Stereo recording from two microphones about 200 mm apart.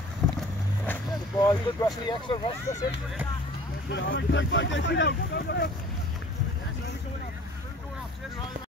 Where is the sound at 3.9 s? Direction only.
65° left (ahead or behind).